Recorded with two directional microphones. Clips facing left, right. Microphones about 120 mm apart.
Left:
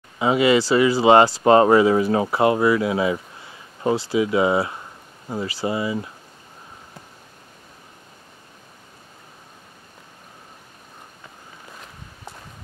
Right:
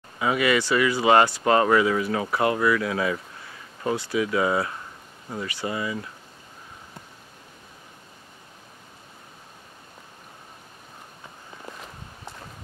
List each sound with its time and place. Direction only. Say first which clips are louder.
0.2 s speech: left 5 dB; 25° left (ahead or behind)